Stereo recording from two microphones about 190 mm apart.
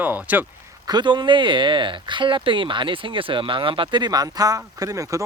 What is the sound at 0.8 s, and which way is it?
Speech, 25° right (ahead or behind).